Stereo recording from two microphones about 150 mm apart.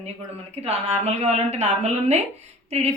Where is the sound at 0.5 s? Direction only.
45° right (ahead or behind).